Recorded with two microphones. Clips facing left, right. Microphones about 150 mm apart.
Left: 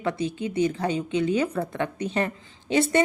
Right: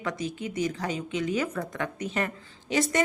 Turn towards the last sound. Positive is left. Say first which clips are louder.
# left 4 dB
turn(degrees=30)  # may be behind; listen again after turning